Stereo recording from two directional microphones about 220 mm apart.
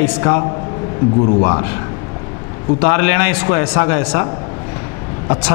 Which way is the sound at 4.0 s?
10° left (ahead or behind).